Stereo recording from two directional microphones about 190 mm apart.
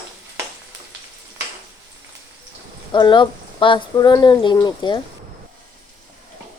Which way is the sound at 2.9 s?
25° left (ahead or behind).